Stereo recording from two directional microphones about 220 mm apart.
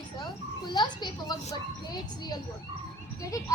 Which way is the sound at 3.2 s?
15° left (ahead or behind).